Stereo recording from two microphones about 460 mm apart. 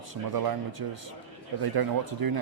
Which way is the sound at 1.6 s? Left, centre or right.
Right.